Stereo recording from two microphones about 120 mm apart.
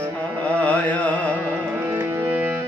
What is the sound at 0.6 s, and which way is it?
Carnatic music, 10° left (ahead or behind).